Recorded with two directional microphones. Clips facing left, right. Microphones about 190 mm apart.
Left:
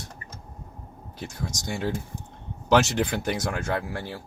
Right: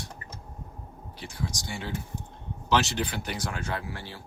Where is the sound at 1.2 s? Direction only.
45° left (ahead or behind).